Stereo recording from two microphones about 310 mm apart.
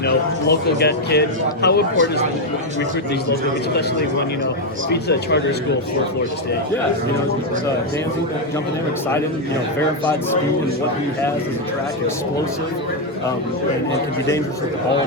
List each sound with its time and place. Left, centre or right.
0.0 s speech: left
4.9 s speech: left